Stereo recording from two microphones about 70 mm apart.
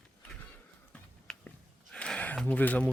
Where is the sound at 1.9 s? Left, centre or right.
Centre.